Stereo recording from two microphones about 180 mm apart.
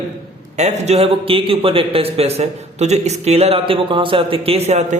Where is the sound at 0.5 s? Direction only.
40° right (ahead or behind).